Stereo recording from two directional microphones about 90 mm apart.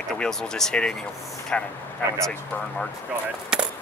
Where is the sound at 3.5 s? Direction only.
10° right (ahead or behind).